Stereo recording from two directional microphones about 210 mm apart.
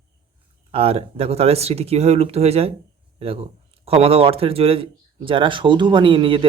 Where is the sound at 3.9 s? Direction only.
30° right (ahead or behind).